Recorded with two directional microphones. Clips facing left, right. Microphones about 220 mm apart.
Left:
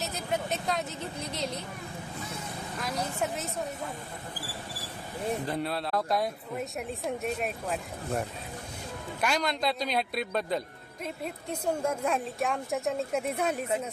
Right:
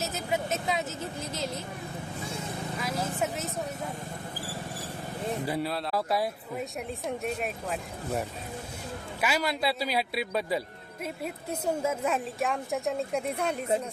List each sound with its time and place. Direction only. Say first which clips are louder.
0.0 s speech: right 1 dB; centre (ahead or behind)
2.7 s a woman's voice: even; centre (ahead or behind)
4.4 s vehicle: right 3 dB; 45° right (ahead or behind)
5.5 s a woman's voice: right 1 dB; 5° right (ahead or behind)